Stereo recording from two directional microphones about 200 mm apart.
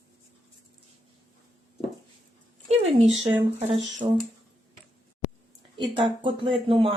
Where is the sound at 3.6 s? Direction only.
35° right (ahead or behind).